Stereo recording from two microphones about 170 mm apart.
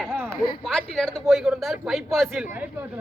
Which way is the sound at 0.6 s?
5° left (ahead or behind).